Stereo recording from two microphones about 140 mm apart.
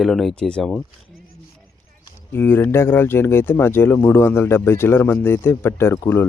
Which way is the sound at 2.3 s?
15° left (ahead or behind).